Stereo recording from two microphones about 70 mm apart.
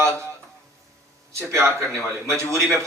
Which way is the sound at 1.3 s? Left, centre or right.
Right.